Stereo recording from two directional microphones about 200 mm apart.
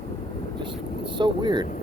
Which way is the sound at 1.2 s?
20° right (ahead or behind).